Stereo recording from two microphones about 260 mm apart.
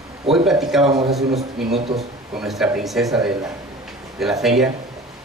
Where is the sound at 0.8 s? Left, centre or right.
Right.